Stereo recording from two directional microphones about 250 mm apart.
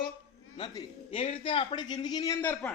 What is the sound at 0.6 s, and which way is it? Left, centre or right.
A man's voice, centre.